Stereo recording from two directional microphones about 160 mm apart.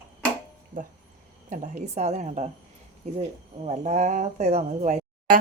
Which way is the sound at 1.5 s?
45° right (ahead or behind).